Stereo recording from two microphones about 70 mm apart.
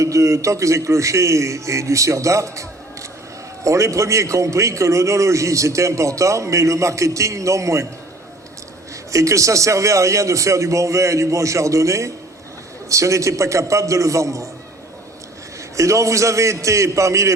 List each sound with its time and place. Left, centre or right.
0.0 s a man's voice: right
9.1 s a man's voice: right
15.7 s a man's voice: right